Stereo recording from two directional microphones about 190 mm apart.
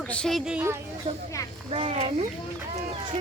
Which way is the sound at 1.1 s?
25° right (ahead or behind).